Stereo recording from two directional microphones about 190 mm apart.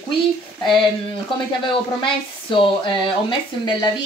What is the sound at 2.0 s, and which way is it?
Speech, 25° left (ahead or behind).